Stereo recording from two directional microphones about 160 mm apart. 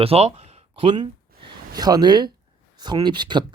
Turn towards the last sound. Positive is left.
turn(degrees=-30)  # may be behind; listen again after turning